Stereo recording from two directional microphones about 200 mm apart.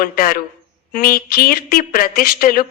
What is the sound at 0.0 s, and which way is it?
A woman's voice, 45° left (ahead or behind).